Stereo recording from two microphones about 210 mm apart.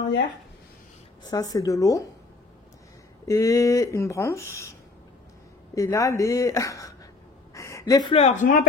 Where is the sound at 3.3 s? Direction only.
15° left (ahead or behind).